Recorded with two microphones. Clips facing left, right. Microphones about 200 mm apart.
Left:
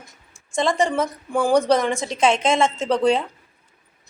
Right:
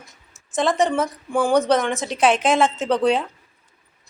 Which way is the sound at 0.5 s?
5° right (ahead or behind).